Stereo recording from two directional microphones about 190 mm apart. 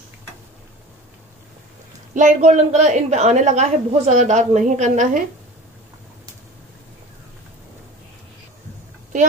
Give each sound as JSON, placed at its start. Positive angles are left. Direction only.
{"t": 2.1, "sound": "a woman's voice", "side_deg": -40}